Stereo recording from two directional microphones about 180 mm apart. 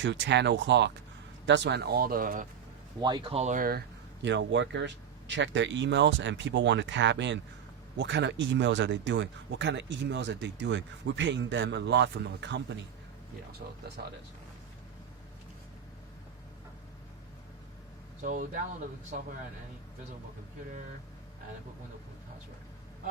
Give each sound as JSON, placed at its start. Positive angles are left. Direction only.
{"t": 0.0, "sound": "speech", "side_deg": -80}
{"t": 3.0, "sound": "speech", "side_deg": -25}
{"t": 13.5, "sound": "speech", "side_deg": -70}
{"t": 18.2, "sound": "speech", "side_deg": -45}
{"t": 19.1, "sound": "speech", "side_deg": -55}